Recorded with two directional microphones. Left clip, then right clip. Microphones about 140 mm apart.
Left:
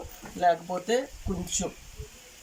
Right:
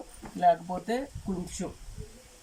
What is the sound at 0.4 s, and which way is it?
Speech, 5° right (ahead or behind).